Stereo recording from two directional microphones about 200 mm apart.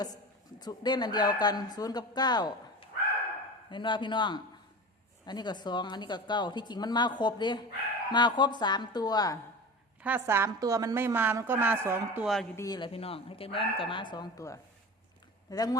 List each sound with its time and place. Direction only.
0.6 s a woman's voice: 20° left (ahead or behind)
10.0 s a woman's voice: 10° right (ahead or behind)
12.5 s a woman's voice: 20° left (ahead or behind)